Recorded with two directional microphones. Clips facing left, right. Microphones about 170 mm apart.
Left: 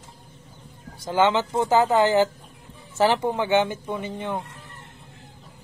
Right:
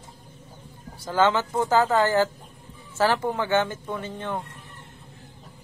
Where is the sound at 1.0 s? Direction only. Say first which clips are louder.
Left 1 dB; 20° left (ahead or behind).